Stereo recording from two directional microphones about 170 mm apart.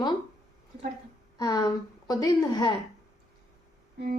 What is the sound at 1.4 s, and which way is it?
A woman's voice, 25° left (ahead or behind).